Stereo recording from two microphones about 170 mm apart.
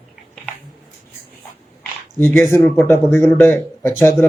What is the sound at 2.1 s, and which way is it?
Speech, 15° left (ahead or behind).